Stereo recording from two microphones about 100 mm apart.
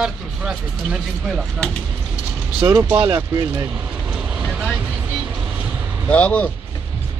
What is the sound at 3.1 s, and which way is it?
Speech, 40° right (ahead or behind).